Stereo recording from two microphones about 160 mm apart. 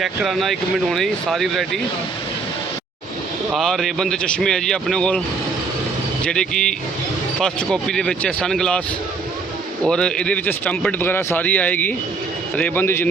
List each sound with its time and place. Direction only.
0.0 s speech: centre (ahead or behind)
3.5 s speech: centre (ahead or behind)
6.2 s speech: 5° left (ahead or behind)
9.8 s speech: 5° left (ahead or behind)